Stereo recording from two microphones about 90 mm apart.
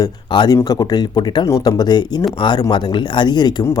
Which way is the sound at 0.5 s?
45° left (ahead or behind).